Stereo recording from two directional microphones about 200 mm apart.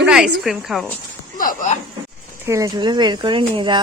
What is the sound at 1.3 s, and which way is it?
Speech, 45° left (ahead or behind).